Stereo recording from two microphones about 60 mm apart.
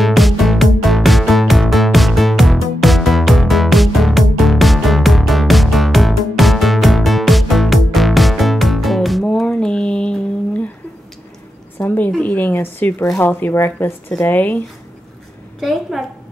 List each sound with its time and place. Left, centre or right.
0.0 s music: centre
9.2 s a sound: centre
11.8 s a sound: left
12.5 s zipper: left
13.2 s speech: left
15.6 s a woman's voice: centre